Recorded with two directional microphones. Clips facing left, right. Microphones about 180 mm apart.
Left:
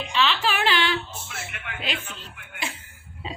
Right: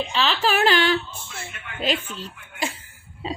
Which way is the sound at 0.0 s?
35° right (ahead or behind).